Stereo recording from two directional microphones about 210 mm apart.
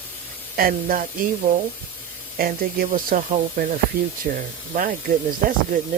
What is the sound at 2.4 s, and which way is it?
Speech, 45° right (ahead or behind).